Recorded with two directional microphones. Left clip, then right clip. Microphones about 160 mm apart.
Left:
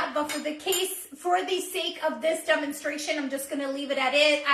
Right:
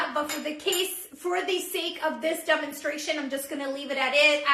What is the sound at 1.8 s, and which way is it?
A woman's voice, 30° right (ahead or behind).